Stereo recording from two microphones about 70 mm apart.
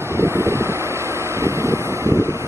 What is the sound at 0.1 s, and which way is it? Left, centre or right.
Vehicle, right.